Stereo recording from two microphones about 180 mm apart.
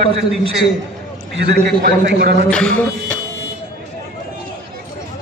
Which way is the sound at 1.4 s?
60° right (ahead or behind).